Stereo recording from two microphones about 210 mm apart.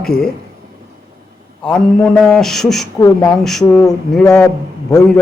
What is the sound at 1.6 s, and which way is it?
Speech, 5° left (ahead or behind).